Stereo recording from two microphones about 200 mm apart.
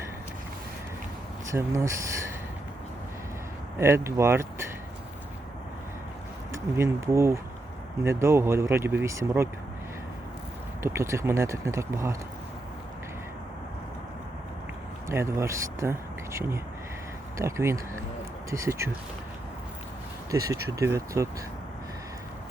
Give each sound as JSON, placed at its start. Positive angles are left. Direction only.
{"t": 1.5, "sound": "speech", "side_deg": -15}
{"t": 3.8, "sound": "speech", "side_deg": -15}
{"t": 6.5, "sound": "speech", "side_deg": -15}
{"t": 10.8, "sound": "speech", "side_deg": -15}
{"t": 15.1, "sound": "speech", "side_deg": -15}
{"t": 20.3, "sound": "speech", "side_deg": -15}